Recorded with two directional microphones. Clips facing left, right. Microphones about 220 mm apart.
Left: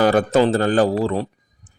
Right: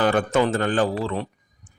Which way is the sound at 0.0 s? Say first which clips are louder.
Left 4 dB; 40° left (ahead or behind).